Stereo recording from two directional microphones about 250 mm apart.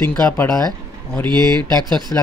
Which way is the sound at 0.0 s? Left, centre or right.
Centre.